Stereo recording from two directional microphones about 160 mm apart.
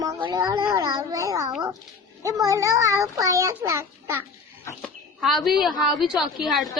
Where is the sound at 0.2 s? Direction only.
25° right (ahead or behind).